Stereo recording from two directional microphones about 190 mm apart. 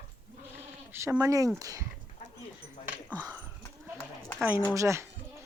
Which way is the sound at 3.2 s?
15° right (ahead or behind).